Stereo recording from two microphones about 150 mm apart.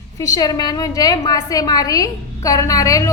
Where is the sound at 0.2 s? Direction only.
25° left (ahead or behind).